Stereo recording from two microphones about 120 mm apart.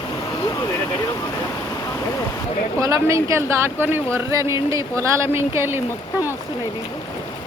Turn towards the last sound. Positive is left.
turn(degrees=-20)  # may be behind; listen again after turning